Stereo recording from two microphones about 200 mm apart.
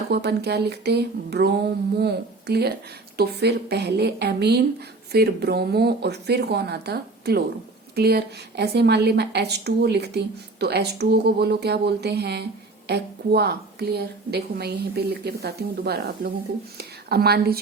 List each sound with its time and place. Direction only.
0.1 s a woman's voice: 55° right (ahead or behind)